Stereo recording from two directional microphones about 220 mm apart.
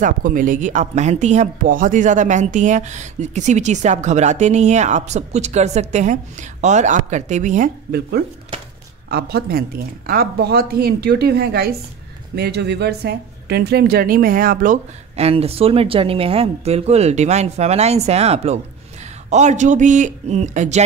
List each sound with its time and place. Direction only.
0.0 s a woman's voice: 40° right (ahead or behind)